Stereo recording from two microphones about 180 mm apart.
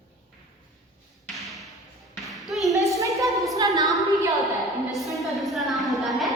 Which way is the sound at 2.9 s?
15° right (ahead or behind).